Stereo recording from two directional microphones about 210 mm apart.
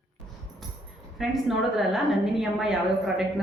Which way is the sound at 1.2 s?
Centre (ahead or behind).